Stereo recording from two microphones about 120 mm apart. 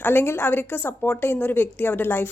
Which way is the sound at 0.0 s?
15° left (ahead or behind).